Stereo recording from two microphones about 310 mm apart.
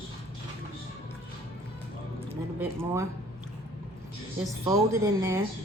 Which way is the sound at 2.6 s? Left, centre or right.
Centre.